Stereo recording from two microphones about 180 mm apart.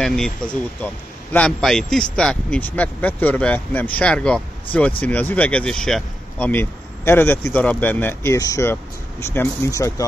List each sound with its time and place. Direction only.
0.0 s speech: 5° left (ahead or behind); by 10.0 s 20° left (ahead or behind)